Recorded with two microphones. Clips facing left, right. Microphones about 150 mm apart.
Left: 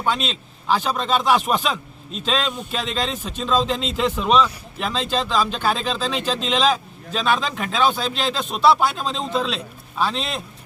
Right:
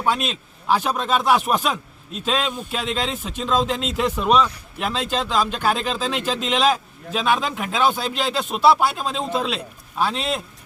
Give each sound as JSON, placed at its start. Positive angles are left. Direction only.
{"t": 0.0, "sound": "speech", "side_deg": -10}